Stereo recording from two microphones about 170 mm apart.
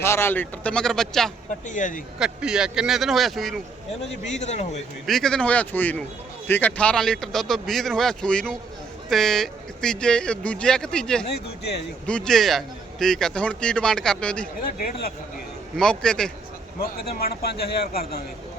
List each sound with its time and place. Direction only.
0.0 s speech: 15° left (ahead or behind)
1.6 s speech: 50° left (ahead or behind)
2.1 s a man's voice: 5° right (ahead or behind)
4.3 s speech: 40° left (ahead or behind)
5.0 s a man's voice: centre (ahead or behind)
11.3 s speech: 75° left (ahead or behind)
12.0 s a man's voice: 5° left (ahead or behind)
15.8 s a man's voice: 5° left (ahead or behind)
16.8 s speech: 65° left (ahead or behind)